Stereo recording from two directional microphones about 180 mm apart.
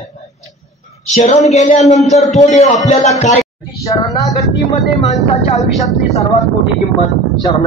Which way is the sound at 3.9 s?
20° left (ahead or behind).